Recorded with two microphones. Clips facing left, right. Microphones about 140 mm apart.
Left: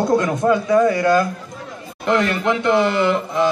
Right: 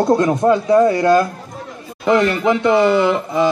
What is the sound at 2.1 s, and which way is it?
Speech, centre (ahead or behind).